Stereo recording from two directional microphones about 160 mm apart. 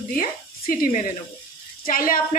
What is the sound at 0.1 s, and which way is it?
A woman's voice, 60° left (ahead or behind).